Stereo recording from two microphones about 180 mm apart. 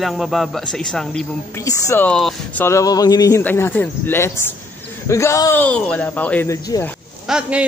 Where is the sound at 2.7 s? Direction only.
20° left (ahead or behind).